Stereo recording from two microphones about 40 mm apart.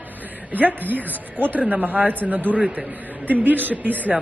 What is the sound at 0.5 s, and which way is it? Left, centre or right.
A woman's voice, right.